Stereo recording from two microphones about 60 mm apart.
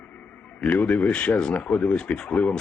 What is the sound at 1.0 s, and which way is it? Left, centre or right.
Speech, left.